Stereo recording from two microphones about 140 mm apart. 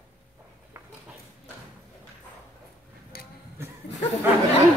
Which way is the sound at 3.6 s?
15° right (ahead or behind).